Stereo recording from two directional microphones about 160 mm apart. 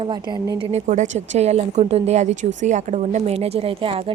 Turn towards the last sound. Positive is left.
turn(degrees=-35)  # may be behind; listen again after turning